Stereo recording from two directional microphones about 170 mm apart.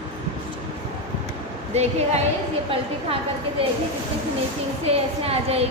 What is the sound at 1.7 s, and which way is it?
Speech, 40° right (ahead or behind).